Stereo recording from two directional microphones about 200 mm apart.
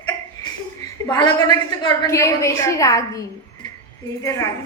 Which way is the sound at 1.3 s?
20° left (ahead or behind).